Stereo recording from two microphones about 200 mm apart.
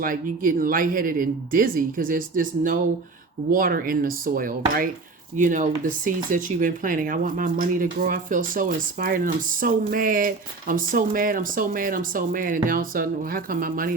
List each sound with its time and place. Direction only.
0.0 s speech: 45° right (ahead or behind)